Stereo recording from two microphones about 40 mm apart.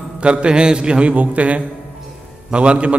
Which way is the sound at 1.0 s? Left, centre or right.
Right.